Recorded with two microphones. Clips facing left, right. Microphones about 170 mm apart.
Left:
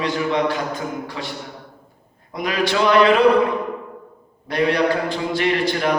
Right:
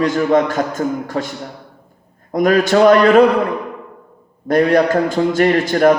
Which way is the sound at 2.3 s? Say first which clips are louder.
Right 8 dB; 45° right (ahead or behind).